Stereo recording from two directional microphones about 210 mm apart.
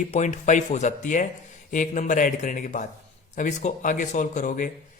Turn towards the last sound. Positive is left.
turn(degrees=40)  # may be behind; listen again after turning